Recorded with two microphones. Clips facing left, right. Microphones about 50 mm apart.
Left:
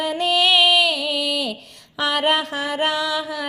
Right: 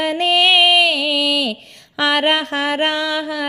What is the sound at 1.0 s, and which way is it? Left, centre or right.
Speech, right.